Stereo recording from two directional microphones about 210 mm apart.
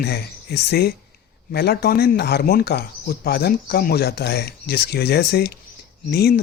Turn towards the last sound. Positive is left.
turn(degrees=50)  # may be behind; listen again after turning